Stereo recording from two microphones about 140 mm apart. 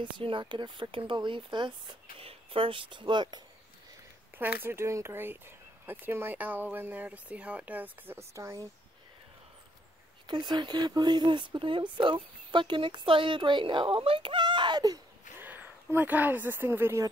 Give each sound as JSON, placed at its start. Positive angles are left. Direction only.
{"t": 0.0, "sound": "speech", "side_deg": -35}
{"t": 4.4, "sound": "speech", "side_deg": -15}
{"t": 10.2, "sound": "speech", "side_deg": -35}
{"t": 15.3, "sound": "speech", "side_deg": -15}